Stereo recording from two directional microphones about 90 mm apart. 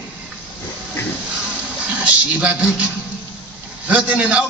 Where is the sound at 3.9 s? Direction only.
15° right (ahead or behind).